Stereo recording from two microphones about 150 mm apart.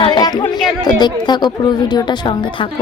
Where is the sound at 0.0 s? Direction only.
30° left (ahead or behind).